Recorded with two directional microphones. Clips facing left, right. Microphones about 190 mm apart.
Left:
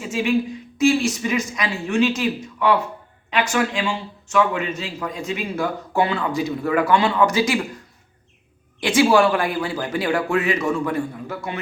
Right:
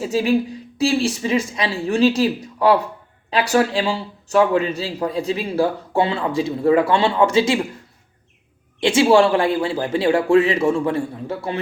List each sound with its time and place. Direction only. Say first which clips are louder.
0.0 s speech: right 3 dB; 35° right (ahead or behind)
8.8 s speech: right 2 dB; 25° right (ahead or behind)